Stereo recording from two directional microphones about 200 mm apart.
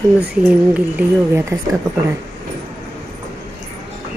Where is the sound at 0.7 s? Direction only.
10° right (ahead or behind).